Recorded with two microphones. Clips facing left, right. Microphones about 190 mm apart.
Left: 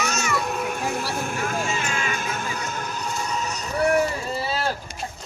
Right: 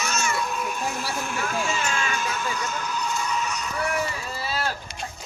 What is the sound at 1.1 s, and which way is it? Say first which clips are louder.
Music: left 2 dB; 50° left (ahead or behind).